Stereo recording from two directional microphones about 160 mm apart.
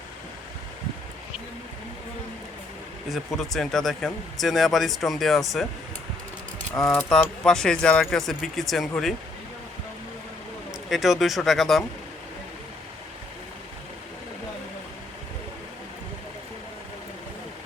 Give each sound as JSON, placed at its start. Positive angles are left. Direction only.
{"t": 3.1, "sound": "speech", "side_deg": 0}
{"t": 6.8, "sound": "speech", "side_deg": 0}
{"t": 10.8, "sound": "speech", "side_deg": 0}